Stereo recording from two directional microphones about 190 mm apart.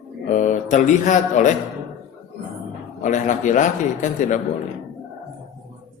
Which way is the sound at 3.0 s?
40° left (ahead or behind).